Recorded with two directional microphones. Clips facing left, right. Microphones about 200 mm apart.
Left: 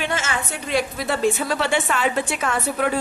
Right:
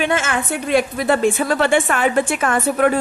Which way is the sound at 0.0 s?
55° right (ahead or behind).